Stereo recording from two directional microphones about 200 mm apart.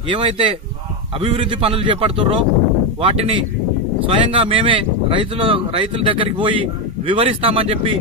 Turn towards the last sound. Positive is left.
turn(degrees=-25)  # may be behind; listen again after turning